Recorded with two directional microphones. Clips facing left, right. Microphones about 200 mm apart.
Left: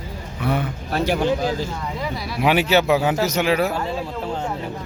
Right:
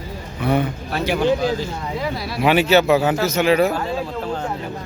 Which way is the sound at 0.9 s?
45° left (ahead or behind).